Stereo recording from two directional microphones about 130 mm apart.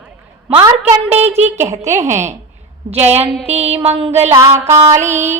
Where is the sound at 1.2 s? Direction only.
15° right (ahead or behind).